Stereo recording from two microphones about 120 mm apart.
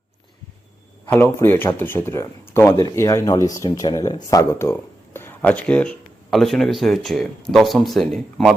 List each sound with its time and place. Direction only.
1.0 s speech: 20° left (ahead or behind); by 8.5 s centre (ahead or behind)